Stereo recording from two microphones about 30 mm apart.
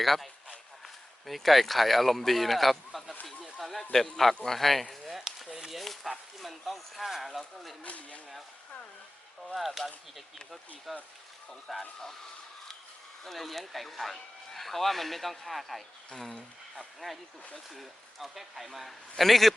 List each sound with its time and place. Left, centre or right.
0.0 s speech: centre
1.3 s speech: centre
3.2 s a sound: centre
3.9 s speech: centre
5.5 s a sound: centre
5.8 s speech: centre
7.9 s speech: left
9.6 s speech: centre
13.2 s speech: centre